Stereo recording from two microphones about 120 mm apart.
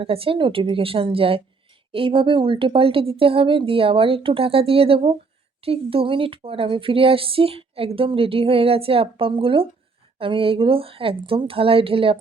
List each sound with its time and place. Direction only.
0.0 s speech: 50° right (ahead or behind)